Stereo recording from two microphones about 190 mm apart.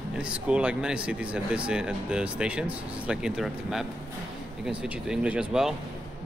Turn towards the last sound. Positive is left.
turn(degrees=-5)  # may be behind; listen again after turning